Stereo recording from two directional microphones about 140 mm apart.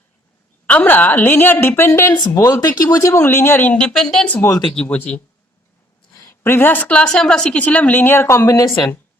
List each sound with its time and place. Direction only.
0.7 s a woman's voice: 10° left (ahead or behind)
4.4 s speech: 20° left (ahead or behind)
4.7 s a woman's voice: 5° left (ahead or behind)
6.1 s a woman's voice: 20° left (ahead or behind)